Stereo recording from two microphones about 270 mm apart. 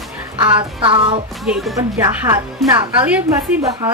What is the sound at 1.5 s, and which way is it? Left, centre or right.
A woman's voice, centre.